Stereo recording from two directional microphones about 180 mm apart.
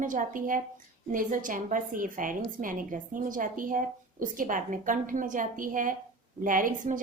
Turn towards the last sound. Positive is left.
turn(degrees=-45)  # may be behind; listen again after turning